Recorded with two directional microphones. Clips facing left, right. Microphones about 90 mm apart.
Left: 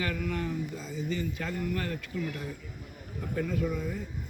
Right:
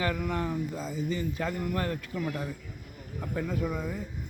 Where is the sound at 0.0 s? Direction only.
25° right (ahead or behind).